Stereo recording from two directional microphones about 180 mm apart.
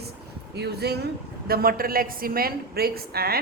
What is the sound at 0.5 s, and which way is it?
A woman's voice, 65° right (ahead or behind).